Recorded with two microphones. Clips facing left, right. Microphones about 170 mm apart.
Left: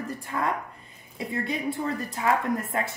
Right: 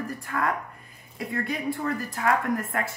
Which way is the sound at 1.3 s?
20° left (ahead or behind).